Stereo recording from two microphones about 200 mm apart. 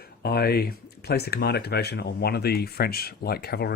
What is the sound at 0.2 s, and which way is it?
Speech, 50° left (ahead or behind).